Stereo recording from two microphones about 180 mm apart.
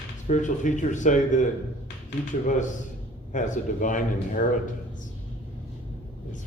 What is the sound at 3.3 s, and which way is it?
Speech, 45° left (ahead or behind).